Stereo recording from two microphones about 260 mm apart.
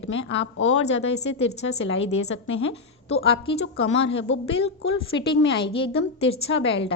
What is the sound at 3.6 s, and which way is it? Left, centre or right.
A woman's voice, left.